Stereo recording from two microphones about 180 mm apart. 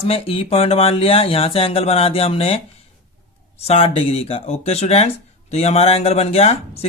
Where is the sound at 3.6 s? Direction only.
35° left (ahead or behind).